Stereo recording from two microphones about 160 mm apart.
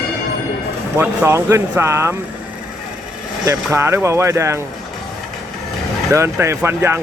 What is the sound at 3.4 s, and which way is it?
Speech, 20° right (ahead or behind).